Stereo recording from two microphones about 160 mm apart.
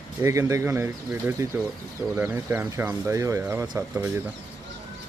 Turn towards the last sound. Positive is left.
turn(degrees=-15)  # may be behind; listen again after turning